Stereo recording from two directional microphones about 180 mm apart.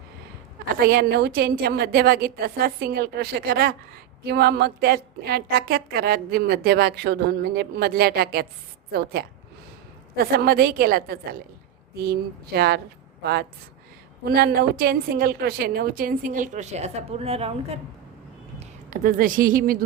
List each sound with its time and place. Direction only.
0.8 s a woman's voice: 55° right (ahead or behind)
14.3 s a woman's voice: 60° right (ahead or behind); by 17.7 s 35° right (ahead or behind)
18.6 s a woman's voice: 45° right (ahead or behind)